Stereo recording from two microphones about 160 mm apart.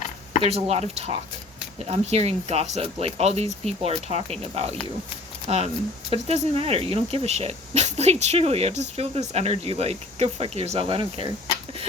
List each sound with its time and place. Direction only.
0.4 s speech: 40° right (ahead or behind)